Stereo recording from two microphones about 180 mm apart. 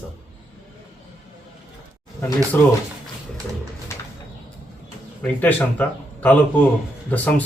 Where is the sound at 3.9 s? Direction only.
15° left (ahead or behind).